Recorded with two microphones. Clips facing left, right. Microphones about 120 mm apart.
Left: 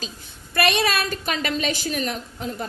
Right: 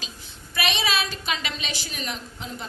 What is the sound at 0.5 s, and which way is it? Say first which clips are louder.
A woman's voice: left 5 dB; 55° left (ahead or behind).